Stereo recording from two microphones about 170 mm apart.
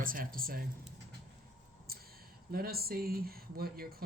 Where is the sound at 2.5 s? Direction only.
60° right (ahead or behind).